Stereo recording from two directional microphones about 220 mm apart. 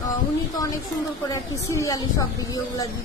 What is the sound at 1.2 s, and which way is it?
A woman's voice, 15° left (ahead or behind).